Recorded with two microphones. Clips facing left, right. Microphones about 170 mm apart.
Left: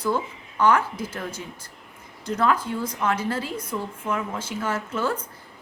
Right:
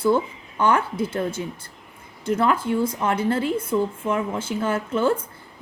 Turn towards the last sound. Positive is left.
turn(degrees=-25)  # may be behind; listen again after turning